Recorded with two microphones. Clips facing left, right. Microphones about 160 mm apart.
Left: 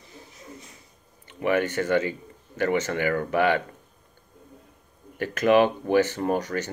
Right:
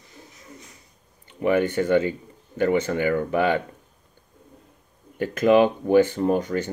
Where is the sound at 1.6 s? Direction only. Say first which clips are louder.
Right 3 dB; 15° right (ahead or behind).